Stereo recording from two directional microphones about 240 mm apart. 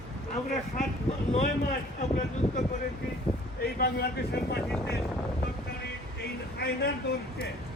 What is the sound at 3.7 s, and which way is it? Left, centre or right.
Speech, left.